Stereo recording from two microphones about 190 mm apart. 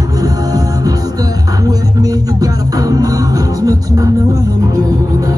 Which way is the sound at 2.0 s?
20° right (ahead or behind).